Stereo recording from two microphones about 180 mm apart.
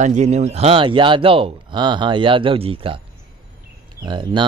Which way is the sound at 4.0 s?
25° right (ahead or behind).